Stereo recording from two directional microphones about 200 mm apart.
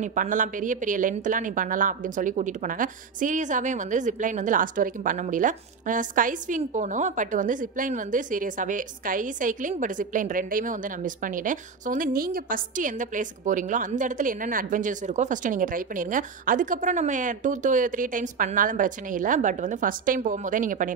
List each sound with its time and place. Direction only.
0.0 s a woman's voice: 40° right (ahead or behind)